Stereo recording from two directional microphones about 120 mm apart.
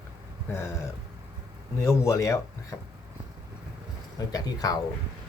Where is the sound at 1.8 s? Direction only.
25° left (ahead or behind).